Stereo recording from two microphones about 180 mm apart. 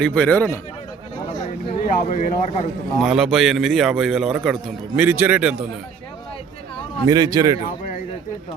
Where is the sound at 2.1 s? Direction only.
40° left (ahead or behind).